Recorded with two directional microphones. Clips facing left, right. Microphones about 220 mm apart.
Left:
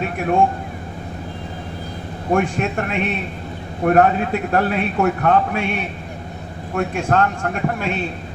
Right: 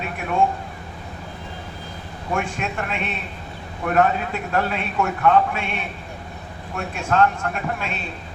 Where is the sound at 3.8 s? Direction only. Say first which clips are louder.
Left 5 dB; 45° left (ahead or behind).